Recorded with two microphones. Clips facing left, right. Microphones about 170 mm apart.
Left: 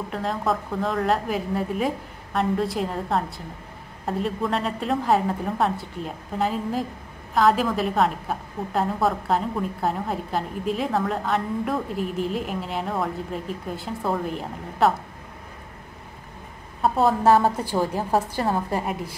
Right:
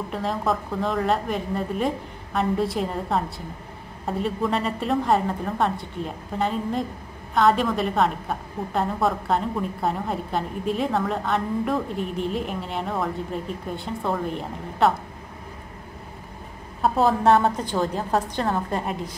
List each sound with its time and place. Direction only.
0.1 s a woman's voice: centre (ahead or behind)
16.8 s a woman's voice: centre (ahead or behind)